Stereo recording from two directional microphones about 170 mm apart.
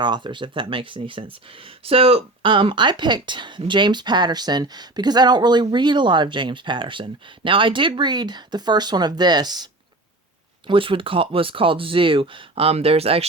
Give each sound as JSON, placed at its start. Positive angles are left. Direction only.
{"t": 0.0, "sound": "speech", "side_deg": -25}
{"t": 10.7, "sound": "speech", "side_deg": -30}